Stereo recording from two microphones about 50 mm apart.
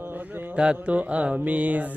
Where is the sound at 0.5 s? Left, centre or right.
Right.